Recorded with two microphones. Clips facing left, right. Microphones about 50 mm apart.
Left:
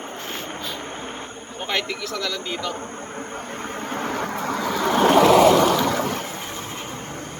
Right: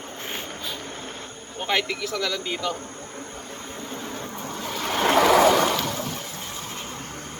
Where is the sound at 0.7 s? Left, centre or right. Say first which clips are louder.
Left 4 dB; left.